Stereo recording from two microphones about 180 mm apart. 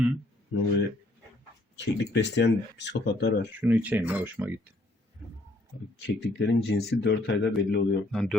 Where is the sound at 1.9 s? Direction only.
70° left (ahead or behind).